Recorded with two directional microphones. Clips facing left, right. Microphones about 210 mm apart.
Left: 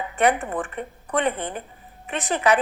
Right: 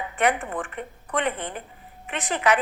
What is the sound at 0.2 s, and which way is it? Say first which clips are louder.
A woman's voice: left 3 dB; 35° left (ahead or behind).